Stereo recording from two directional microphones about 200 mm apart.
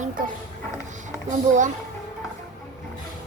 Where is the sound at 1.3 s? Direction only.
40° right (ahead or behind).